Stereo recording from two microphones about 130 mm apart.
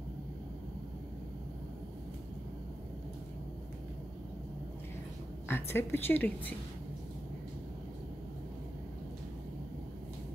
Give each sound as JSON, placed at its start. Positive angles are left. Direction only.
{"t": 5.5, "sound": "a woman's voice", "side_deg": 20}